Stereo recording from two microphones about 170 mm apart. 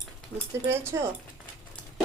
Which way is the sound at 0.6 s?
15° right (ahead or behind).